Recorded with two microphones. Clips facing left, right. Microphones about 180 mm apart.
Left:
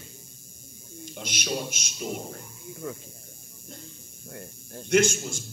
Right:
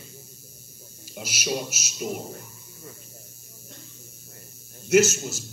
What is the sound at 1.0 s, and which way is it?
A man's voice, 5° right (ahead or behind).